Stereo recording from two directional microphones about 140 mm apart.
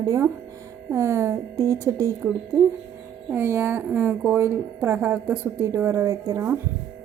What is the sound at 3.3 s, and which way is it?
A woman's voice, 20° right (ahead or behind).